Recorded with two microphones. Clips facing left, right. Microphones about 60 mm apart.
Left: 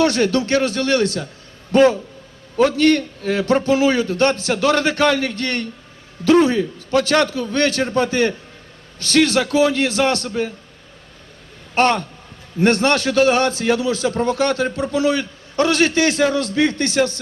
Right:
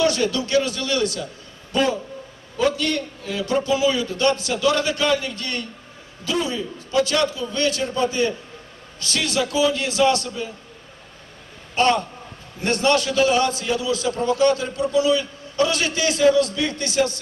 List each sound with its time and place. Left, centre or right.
0.0 s a man's voice: left
11.7 s a man's voice: left